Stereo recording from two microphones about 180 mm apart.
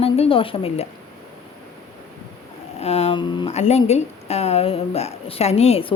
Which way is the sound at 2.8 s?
35° left (ahead or behind).